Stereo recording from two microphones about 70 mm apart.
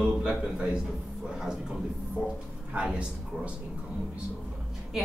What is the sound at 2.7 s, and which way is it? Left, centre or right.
Speech, centre.